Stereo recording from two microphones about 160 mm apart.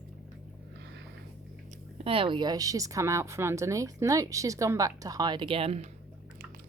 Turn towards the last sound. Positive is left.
turn(degrees=-40)  # may be behind; listen again after turning